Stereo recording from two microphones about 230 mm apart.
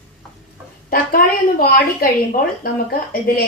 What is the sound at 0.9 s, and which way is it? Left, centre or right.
A woman's voice, left.